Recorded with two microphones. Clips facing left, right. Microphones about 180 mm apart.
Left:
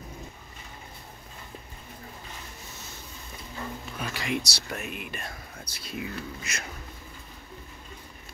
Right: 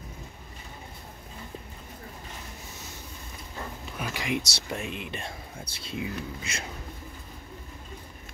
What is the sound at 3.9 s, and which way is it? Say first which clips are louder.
Speech: right 1 dB; 15° right (ahead or behind).